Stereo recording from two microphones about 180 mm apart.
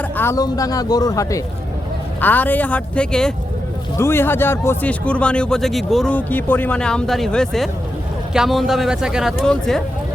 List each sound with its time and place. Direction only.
0.2 s speech: 15° left (ahead or behind)
3.9 s speech: 15° left (ahead or behind)